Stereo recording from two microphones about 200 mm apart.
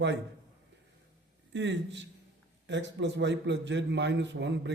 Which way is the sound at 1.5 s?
65° right (ahead or behind).